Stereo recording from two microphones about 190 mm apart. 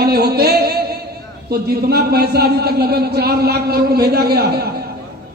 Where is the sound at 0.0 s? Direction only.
55° right (ahead or behind).